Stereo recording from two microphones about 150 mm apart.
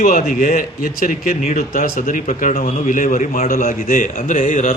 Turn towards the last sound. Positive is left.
turn(degrees=60)  # may be behind; listen again after turning